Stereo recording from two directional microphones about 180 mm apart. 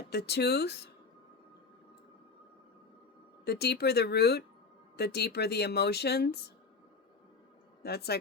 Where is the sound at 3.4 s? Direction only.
65° left (ahead or behind).